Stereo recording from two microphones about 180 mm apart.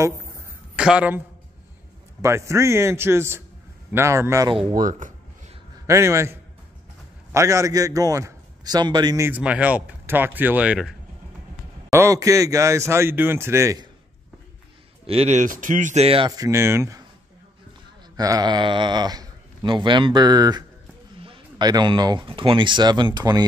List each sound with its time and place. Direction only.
0.7 s speech: 5° right (ahead or behind)
2.2 s a man's voice: 15° right (ahead or behind)
4.7 s speech: 45° right (ahead or behind)
5.9 s a man's voice: 15° right (ahead or behind)
7.3 s a man's voice: 15° right (ahead or behind)
11.9 s a man's voice: 15° right (ahead or behind)
15.0 s speech: 35° right (ahead or behind)
16.3 s a man's voice: 20° right (ahead or behind)
18.1 s speech: 20° right (ahead or behind)